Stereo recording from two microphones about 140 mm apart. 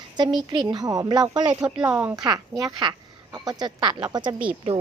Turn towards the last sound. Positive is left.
turn(degrees=-40)  # may be behind; listen again after turning